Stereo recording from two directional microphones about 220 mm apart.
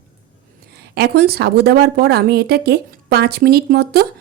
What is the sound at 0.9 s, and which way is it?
Speech, 45° right (ahead or behind).